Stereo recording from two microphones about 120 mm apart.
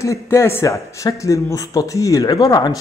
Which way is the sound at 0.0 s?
25° left (ahead or behind).